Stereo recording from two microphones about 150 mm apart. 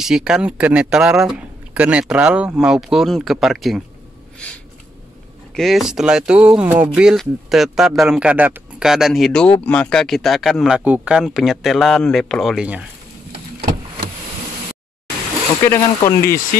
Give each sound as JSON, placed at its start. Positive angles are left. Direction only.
{"t": 0.0, "sound": "speech", "side_deg": -5}
{"t": 5.6, "sound": "speech", "side_deg": 0}
{"t": 15.6, "sound": "speech", "side_deg": 20}